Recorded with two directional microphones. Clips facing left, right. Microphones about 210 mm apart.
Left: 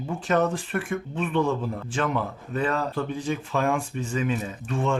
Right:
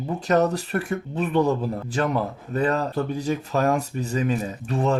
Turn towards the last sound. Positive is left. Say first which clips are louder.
# right 3 dB
turn(degrees=-40)  # may be behind; listen again after turning